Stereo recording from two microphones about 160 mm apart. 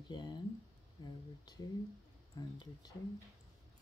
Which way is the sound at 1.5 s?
25° left (ahead or behind).